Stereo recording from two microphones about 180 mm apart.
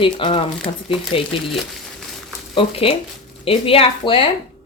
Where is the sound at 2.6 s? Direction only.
30° left (ahead or behind).